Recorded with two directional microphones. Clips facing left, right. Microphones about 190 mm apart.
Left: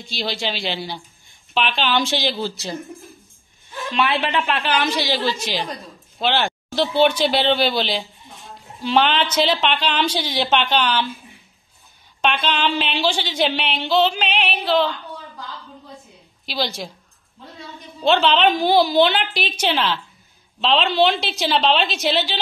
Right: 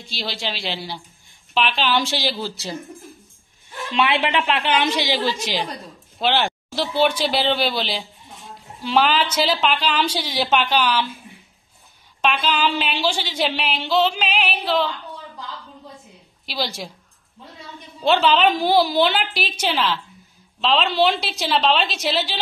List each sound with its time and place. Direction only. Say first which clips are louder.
0.1 s a woman's voice: left 3 dB; centre (ahead or behind)
3.9 s a woman's voice: right 1 dB; 25° right (ahead or behind); by 11.1 s 5° right (ahead or behind)
12.2 s a woman's voice: even; 5° right (ahead or behind)
16.4 s speech: left 2 dB; 5° right (ahead or behind)
18.0 s a woman's voice: even; 5° right (ahead or behind)